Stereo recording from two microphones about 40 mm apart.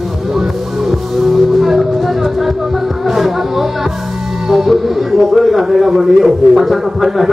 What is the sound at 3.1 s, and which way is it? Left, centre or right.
Music, centre.